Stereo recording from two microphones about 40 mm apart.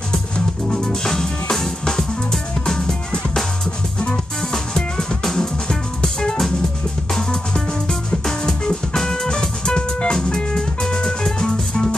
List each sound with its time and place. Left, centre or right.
0.7 s music: centre